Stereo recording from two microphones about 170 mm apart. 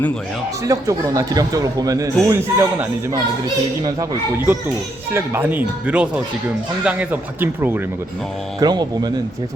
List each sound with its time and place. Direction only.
0.6 s speech: 20° right (ahead or behind)
5.1 s speech: 10° right (ahead or behind)
8.5 s speech: 25° right (ahead or behind)